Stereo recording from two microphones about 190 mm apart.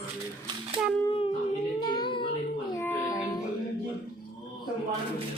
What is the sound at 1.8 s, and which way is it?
Child singing, 25° left (ahead or behind).